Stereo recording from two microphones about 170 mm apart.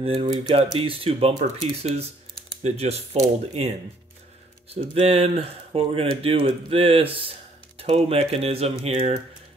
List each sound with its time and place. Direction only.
0.0 s speech: 35° right (ahead or behind)
4.7 s speech: 35° right (ahead or behind)